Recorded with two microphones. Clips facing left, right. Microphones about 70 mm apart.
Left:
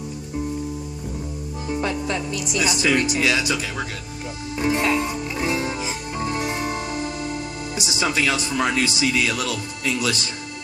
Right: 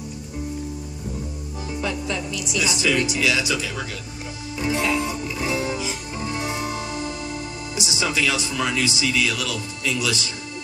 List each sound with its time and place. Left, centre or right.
1.8 s speech: left
4.6 s music: left
7.7 s speech: left